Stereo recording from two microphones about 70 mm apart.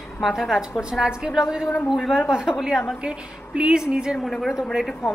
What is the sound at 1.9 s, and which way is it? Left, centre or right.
Speech, centre.